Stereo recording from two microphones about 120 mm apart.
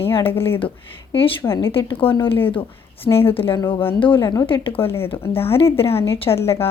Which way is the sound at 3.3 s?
50° left (ahead or behind).